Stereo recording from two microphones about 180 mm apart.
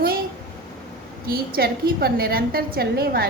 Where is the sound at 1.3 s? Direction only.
55° right (ahead or behind).